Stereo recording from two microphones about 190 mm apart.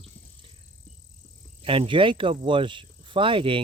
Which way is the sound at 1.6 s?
30° right (ahead or behind).